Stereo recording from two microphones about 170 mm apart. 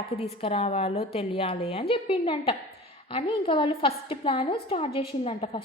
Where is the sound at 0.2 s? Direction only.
35° left (ahead or behind).